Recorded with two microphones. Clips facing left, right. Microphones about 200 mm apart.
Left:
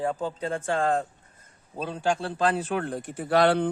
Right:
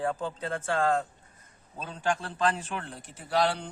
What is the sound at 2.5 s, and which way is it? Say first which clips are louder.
Speech: left 6 dB; 50° left (ahead or behind).